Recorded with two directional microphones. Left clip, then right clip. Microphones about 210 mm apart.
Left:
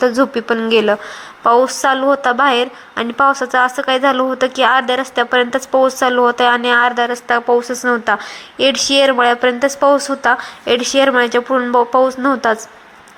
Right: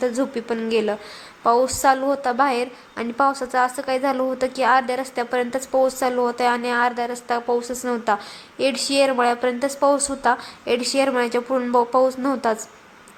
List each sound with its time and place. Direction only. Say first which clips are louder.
0.2 s a woman's voice: left 9 dB; 15° left (ahead or behind)
8.7 s speech: left 9 dB; 20° right (ahead or behind)
9.0 s a woman's voice: left 6 dB; 15° left (ahead or behind)